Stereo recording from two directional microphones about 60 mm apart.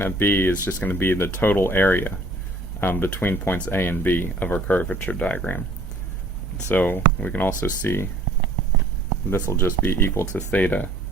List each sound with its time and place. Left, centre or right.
0.0 s speech: left
6.7 s speech: left
9.3 s speech: left
10.3 s speech: left